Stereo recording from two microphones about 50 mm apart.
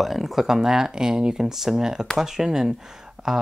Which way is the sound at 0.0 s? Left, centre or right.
Centre.